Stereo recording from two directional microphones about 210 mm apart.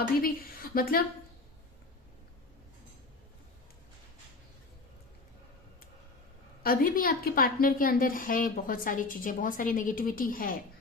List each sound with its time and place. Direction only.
0.2 s a woman's voice: 45° left (ahead or behind)
6.6 s a woman's voice: 45° left (ahead or behind)